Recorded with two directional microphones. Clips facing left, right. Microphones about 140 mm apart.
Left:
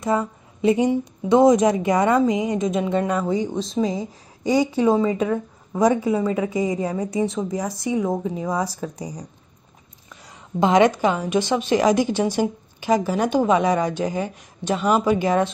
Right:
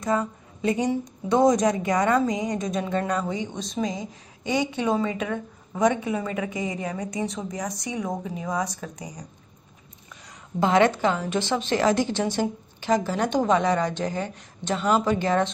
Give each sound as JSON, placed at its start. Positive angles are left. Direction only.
{"t": 0.0, "sound": "a woman's voice", "side_deg": 25}
{"t": 10.6, "sound": "a woman's voice", "side_deg": 15}